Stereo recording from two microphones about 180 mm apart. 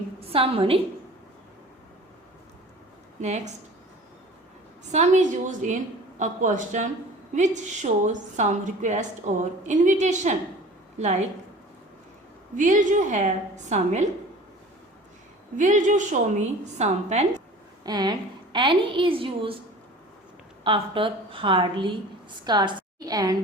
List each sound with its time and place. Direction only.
0.3 s a woman's voice: 30° right (ahead or behind)
3.2 s a woman's voice: 40° right (ahead or behind)
4.9 s a woman's voice: 40° right (ahead or behind)
12.5 s a woman's voice: 45° right (ahead or behind)
15.5 s a woman's voice: 45° right (ahead or behind)
17.8 s a woman's voice: 20° right (ahead or behind)
20.7 s a woman's voice: 30° right (ahead or behind)